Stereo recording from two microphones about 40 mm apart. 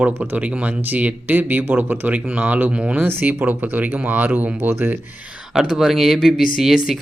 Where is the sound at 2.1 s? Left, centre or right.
Right.